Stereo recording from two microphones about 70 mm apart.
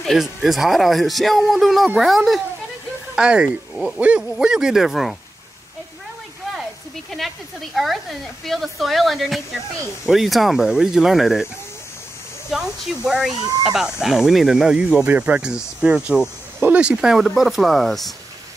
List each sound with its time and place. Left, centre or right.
0.0 s speech: centre
3.2 s speech: centre
7.7 s speech: centre
12.4 s speech: centre